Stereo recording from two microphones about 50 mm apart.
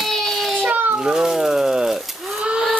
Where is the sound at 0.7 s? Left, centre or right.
Right.